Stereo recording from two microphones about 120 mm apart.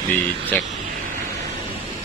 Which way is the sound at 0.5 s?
15° left (ahead or behind).